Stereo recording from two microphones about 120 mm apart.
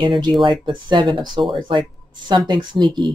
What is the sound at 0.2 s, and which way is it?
Speech, 40° right (ahead or behind).